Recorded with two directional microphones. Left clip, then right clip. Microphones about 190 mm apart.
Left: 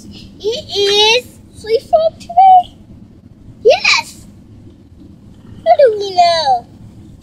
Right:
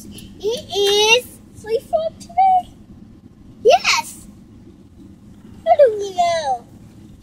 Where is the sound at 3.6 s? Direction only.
20° right (ahead or behind).